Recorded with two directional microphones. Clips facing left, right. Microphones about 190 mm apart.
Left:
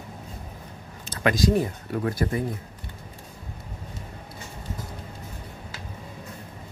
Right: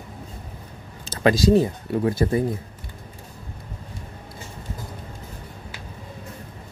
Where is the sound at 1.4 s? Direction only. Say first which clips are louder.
Right 5 dB; 25° right (ahead or behind).